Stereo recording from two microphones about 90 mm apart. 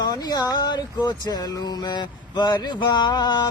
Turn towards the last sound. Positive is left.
turn(degrees=55)  # may be behind; listen again after turning